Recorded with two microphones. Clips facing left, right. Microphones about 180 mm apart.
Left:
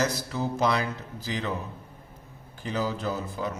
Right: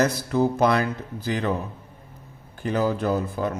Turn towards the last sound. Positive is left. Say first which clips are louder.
# right 6 dB
turn(degrees=-55)  # may be behind; listen again after turning